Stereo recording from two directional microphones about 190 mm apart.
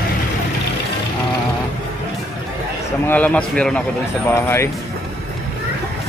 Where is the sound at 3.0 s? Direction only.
10° left (ahead or behind).